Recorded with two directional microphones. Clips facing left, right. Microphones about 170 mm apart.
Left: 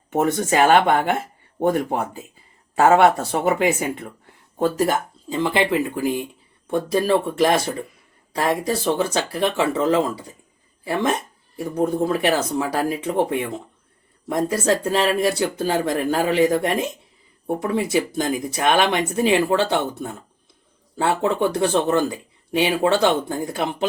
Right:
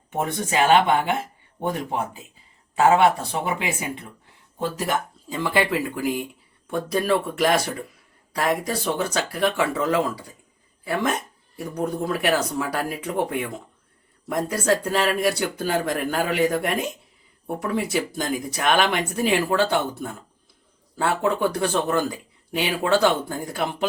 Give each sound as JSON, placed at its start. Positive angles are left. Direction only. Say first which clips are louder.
{"t": 0.1, "sound": "speech", "louder": "left 6 dB", "side_deg": 45}
{"t": 5.3, "sound": "speech", "louder": "left 3 dB", "side_deg": 25}